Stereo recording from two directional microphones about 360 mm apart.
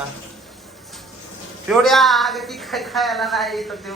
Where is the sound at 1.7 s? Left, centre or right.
Centre.